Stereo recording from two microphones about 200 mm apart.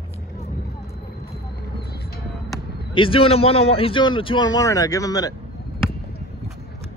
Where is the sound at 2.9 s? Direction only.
25° left (ahead or behind).